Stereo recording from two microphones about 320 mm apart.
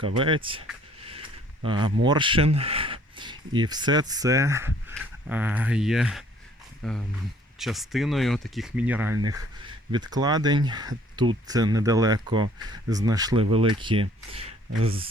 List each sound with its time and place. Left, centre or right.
0.0 s speech: centre
1.6 s speech: centre